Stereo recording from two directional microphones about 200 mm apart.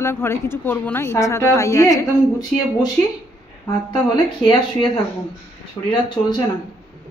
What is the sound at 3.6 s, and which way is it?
Speech, 25° left (ahead or behind).